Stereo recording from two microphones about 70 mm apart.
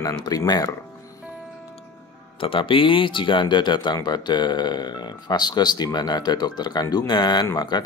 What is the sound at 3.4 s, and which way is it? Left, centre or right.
Speech, left.